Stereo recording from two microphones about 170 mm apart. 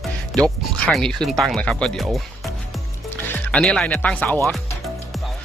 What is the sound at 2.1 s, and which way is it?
Music, centre (ahead or behind).